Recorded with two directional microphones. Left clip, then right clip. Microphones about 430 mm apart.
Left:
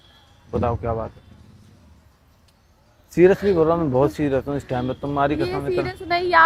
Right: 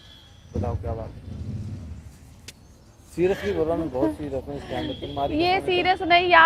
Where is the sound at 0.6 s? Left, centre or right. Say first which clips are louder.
Left 8 dB; left.